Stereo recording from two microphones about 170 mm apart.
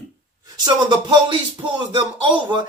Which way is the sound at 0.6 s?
25° right (ahead or behind).